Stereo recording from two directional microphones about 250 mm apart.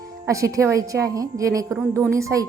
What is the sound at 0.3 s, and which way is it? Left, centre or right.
Speech, centre.